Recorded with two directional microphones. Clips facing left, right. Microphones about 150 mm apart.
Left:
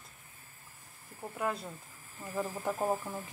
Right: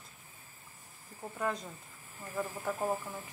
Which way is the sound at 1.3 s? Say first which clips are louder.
Even; 5° left (ahead or behind).